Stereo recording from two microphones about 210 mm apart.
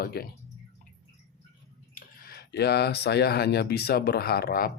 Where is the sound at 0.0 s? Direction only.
45° left (ahead or behind).